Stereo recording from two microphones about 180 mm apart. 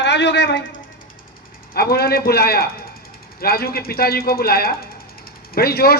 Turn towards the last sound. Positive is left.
turn(degrees=60)  # may be behind; listen again after turning